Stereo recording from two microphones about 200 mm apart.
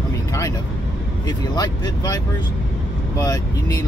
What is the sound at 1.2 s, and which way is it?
Speech, 20° left (ahead or behind).